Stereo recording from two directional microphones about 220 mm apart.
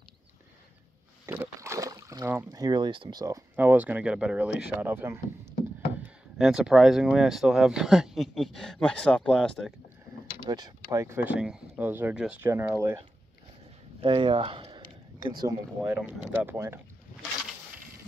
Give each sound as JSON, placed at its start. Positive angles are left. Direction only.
{"t": 1.2, "sound": "speech", "side_deg": -10}
{"t": 10.5, "sound": "speech", "side_deg": -20}
{"t": 14.0, "sound": "speech", "side_deg": -20}